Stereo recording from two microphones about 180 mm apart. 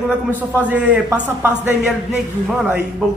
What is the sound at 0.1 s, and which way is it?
A man's voice, 10° right (ahead or behind).